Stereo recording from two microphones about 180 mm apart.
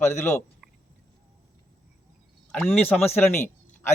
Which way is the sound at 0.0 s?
15° left (ahead or behind).